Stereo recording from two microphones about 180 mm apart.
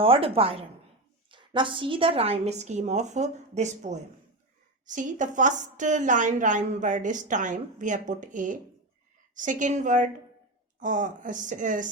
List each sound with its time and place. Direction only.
0.0 s a woman's voice: 30° right (ahead or behind)